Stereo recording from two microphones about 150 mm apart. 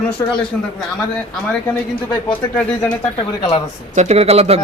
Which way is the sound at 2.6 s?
10° left (ahead or behind).